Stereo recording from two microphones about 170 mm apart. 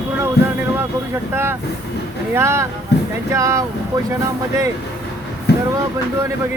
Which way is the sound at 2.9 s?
75° left (ahead or behind).